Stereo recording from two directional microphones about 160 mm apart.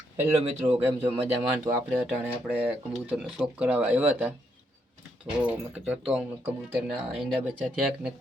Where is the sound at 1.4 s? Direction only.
15° right (ahead or behind).